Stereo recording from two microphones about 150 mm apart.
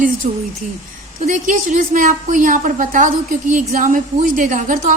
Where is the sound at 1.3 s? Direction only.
60° right (ahead or behind).